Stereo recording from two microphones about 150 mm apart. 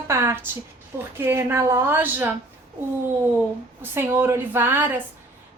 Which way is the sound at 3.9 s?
15° right (ahead or behind).